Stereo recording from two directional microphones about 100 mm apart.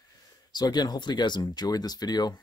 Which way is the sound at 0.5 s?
45° left (ahead or behind).